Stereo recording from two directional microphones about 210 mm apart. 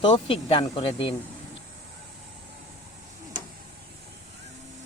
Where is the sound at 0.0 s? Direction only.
25° left (ahead or behind).